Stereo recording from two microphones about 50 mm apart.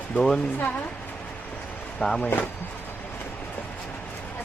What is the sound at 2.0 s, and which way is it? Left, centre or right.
Speech, left.